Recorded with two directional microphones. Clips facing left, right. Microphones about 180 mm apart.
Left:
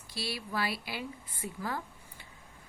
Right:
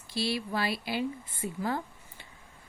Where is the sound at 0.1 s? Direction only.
25° right (ahead or behind).